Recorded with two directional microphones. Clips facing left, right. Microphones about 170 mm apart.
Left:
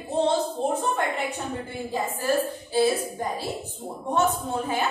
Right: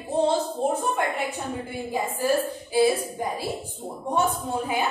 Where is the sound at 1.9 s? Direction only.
10° right (ahead or behind).